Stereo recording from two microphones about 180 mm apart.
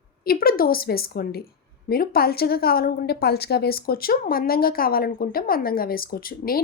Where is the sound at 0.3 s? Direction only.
55° left (ahead or behind).